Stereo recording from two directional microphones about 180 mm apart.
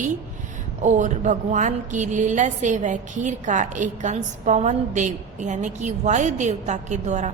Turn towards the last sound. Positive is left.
turn(degrees=-40)  # may be behind; listen again after turning